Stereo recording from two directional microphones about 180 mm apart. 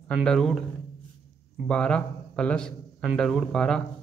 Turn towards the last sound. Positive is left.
turn(degrees=5)  # may be behind; listen again after turning